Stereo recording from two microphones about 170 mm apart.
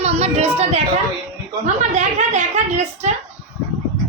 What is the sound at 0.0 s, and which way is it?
A woman's voice, 40° right (ahead or behind).